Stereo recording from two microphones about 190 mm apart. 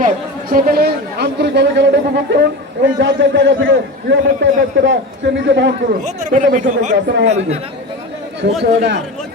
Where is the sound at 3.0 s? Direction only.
70° right (ahead or behind).